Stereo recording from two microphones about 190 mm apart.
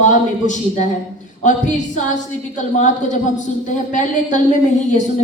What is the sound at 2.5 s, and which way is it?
A woman's voice, 40° left (ahead or behind).